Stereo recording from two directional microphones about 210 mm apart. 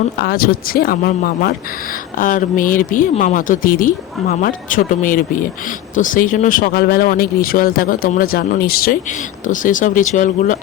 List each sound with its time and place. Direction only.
0.2 s speech: 45° left (ahead or behind)